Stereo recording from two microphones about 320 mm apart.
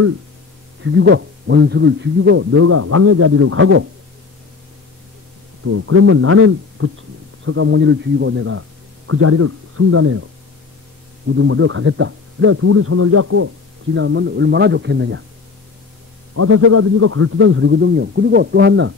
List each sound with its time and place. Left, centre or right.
0.8 s a man's voice: right
5.7 s a man's voice: right
11.3 s a man's voice: right
13.9 s a man's voice: right
16.3 s a man's voice: right